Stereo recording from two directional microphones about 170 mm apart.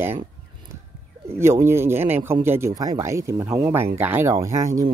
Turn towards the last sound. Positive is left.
turn(degrees=-20)  # may be behind; listen again after turning